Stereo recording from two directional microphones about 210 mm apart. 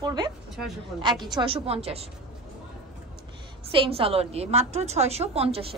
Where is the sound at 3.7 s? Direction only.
25° right (ahead or behind).